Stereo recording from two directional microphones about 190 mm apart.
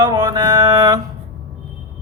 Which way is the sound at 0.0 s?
25° right (ahead or behind).